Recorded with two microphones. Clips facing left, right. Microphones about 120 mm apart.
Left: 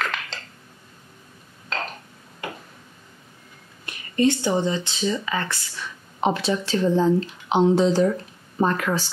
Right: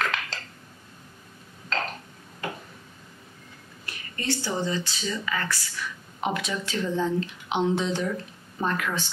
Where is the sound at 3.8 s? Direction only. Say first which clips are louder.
Left 10 dB; 20° left (ahead or behind).